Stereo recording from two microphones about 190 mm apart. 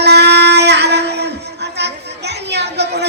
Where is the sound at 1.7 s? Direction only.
60° right (ahead or behind).